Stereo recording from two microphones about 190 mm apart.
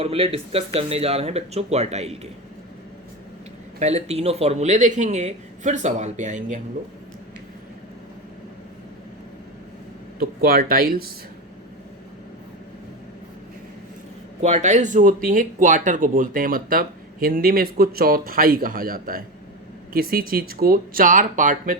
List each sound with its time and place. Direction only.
0.0 s speech: 30° right (ahead or behind)
3.8 s speech: 35° right (ahead or behind)
10.2 s speech: 50° right (ahead or behind)
14.4 s speech: 40° right (ahead or behind)